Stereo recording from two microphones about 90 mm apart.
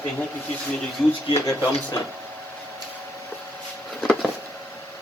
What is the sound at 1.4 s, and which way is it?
Speech, 40° left (ahead or behind).